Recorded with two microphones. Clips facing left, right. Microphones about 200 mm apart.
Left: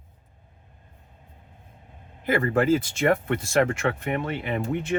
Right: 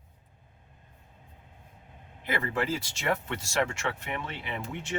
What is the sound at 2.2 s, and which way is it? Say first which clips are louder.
Speech: left 8 dB; 50° left (ahead or behind).